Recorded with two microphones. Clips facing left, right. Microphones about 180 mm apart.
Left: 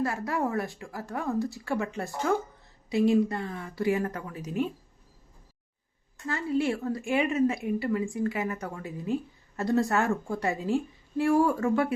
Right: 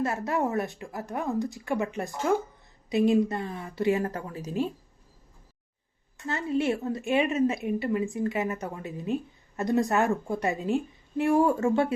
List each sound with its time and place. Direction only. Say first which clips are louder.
0.0 s a woman's voice: right 1 dB; 20° right (ahead or behind)
6.2 s a woman's voice: right 1 dB; 25° right (ahead or behind)